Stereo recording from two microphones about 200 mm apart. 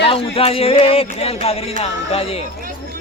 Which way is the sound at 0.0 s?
30° left (ahead or behind).